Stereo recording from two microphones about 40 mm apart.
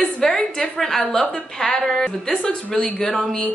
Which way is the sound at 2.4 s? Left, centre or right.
Centre.